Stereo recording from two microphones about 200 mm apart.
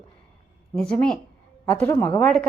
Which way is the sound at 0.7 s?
5° left (ahead or behind).